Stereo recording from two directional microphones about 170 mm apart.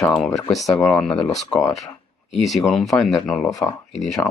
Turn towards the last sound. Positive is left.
turn(degrees=0)  # may be behind; listen again after turning